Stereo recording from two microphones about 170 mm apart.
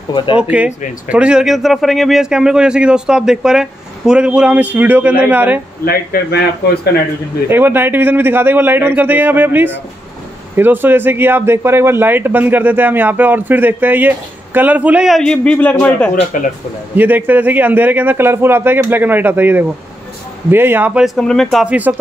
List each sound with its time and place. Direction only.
0.1 s speech: 25° left (ahead or behind)
0.4 s a man's voice: 5° right (ahead or behind)
5.9 s speech: 65° left (ahead or behind)
7.4 s speech: 15° right (ahead or behind); by 15.7 s 5° left (ahead or behind)
16.3 s speech: 50° left (ahead or behind)
16.9 s speech: 10° right (ahead or behind)